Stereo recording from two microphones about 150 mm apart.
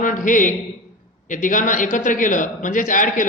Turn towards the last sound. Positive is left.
turn(degrees=60)  # may be behind; listen again after turning